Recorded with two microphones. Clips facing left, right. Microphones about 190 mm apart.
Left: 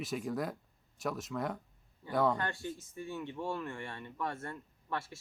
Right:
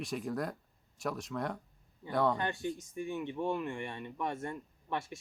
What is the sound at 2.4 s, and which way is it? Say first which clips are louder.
Speech: right 3 dB; 20° right (ahead or behind).